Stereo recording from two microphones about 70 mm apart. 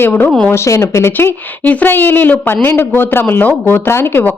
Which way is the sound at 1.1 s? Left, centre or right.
Left.